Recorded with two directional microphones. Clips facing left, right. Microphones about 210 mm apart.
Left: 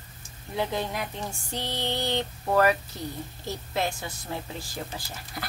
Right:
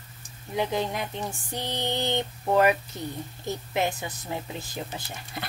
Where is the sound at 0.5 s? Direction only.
20° right (ahead or behind).